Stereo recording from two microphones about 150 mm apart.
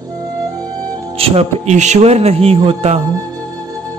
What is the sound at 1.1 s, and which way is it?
A man's voice, 40° right (ahead or behind).